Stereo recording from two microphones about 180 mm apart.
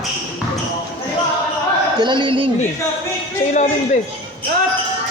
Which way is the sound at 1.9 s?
25° right (ahead or behind).